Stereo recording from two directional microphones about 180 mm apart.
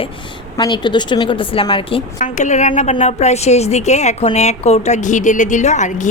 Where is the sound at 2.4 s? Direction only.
40° left (ahead or behind).